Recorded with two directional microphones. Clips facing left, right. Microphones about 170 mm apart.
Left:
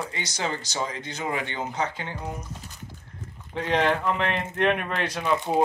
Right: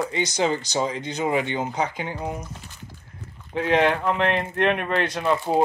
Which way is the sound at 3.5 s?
5° right (ahead or behind).